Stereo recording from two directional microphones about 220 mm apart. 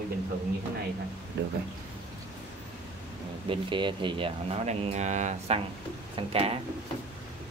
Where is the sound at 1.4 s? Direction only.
50° right (ahead or behind).